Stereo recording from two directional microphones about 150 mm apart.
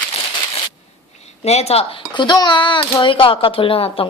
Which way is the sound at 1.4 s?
45° left (ahead or behind).